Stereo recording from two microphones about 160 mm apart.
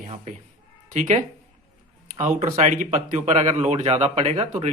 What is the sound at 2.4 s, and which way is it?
A man's voice, 45° right (ahead or behind).